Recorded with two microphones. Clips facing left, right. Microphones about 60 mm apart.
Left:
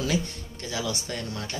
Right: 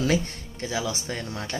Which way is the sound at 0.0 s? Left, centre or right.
Right.